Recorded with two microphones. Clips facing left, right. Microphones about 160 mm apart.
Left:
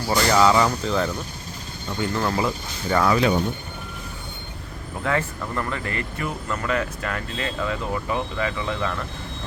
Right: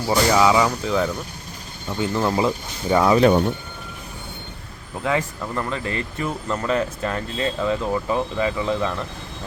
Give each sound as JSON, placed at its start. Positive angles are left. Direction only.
{"t": 0.1, "sound": "speech", "side_deg": -10}
{"t": 2.0, "sound": "speech", "side_deg": -20}
{"t": 5.0, "sound": "speech", "side_deg": -15}